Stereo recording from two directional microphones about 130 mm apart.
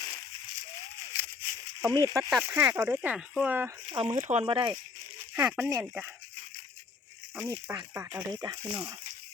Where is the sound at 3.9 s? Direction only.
35° right (ahead or behind).